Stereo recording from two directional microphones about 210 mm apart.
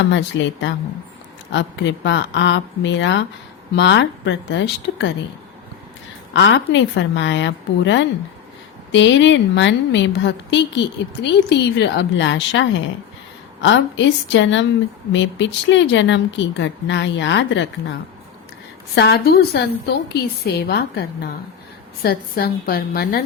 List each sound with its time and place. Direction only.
0.1 s a woman's voice: 60° left (ahead or behind)
6.3 s a woman's voice: 60° left (ahead or behind)
18.9 s a woman's voice: 50° left (ahead or behind)
22.0 s a woman's voice: 45° left (ahead or behind)